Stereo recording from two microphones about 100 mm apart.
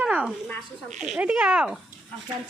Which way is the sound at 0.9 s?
5° right (ahead or behind).